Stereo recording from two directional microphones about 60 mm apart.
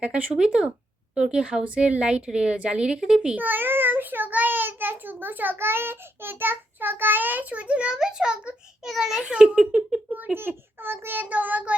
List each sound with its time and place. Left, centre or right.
0.0 s a woman's voice: centre
3.3 s a child's voice: right
7.9 s a woman's voice: centre
9.2 s a woman's voice: centre
10.1 s a child's voice: right
10.8 s child singing: right